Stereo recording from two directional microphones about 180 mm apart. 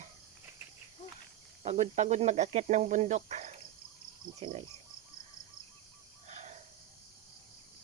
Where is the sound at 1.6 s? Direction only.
35° right (ahead or behind).